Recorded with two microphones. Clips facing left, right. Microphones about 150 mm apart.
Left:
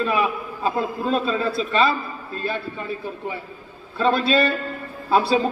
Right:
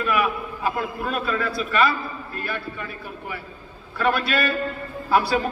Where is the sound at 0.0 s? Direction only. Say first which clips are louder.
Left 1 dB; 25° left (ahead or behind).